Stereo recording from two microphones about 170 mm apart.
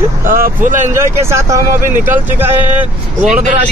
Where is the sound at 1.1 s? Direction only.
15° right (ahead or behind).